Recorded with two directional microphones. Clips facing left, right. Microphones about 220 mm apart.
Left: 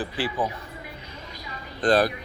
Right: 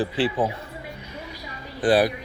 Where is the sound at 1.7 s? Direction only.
10° right (ahead or behind).